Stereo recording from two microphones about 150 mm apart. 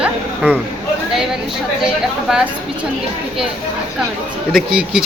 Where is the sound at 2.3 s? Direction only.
5° right (ahead or behind).